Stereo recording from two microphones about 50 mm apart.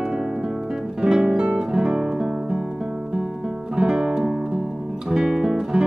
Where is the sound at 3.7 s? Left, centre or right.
Centre.